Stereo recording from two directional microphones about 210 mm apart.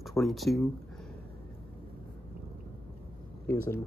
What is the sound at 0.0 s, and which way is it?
Speech, centre (ahead or behind).